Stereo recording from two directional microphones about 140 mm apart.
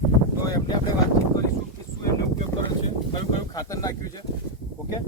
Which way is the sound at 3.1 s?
25° left (ahead or behind).